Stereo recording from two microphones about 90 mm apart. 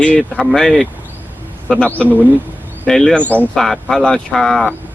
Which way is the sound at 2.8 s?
5° left (ahead or behind).